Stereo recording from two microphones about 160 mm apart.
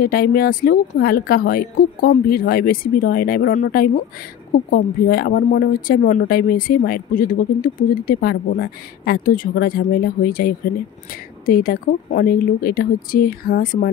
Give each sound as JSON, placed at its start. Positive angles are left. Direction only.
{"t": 0.0, "sound": "speech", "side_deg": 65}